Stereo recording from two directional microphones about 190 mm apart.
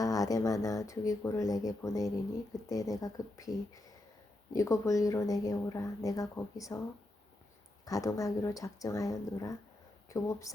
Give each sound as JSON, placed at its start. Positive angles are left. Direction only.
{"t": 0.0, "sound": "speech", "side_deg": 20}
{"t": 7.9, "sound": "speech", "side_deg": 15}